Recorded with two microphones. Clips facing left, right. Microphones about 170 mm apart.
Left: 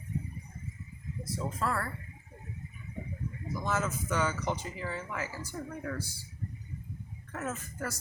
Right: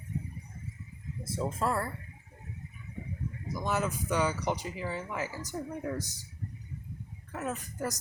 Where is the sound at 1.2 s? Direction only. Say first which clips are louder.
Right 3 dB; 25° right (ahead or behind).